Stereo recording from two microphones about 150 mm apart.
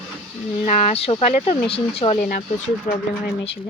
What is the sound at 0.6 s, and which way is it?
Speech, 55° left (ahead or behind).